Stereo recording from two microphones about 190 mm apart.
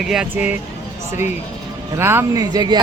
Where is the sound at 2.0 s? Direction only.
15° right (ahead or behind).